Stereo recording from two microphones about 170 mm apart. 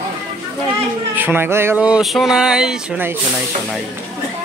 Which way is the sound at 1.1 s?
10° right (ahead or behind).